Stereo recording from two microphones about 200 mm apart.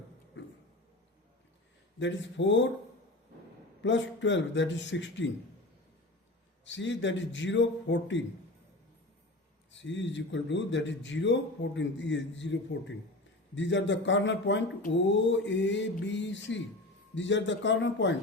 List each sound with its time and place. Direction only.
0.4 s a sound: 65° left (ahead or behind)
2.0 s a man's voice: 65° left (ahead or behind)
3.8 s a man's voice: 65° left (ahead or behind)
6.7 s a man's voice: 65° left (ahead or behind)
9.7 s a man's voice: 65° left (ahead or behind)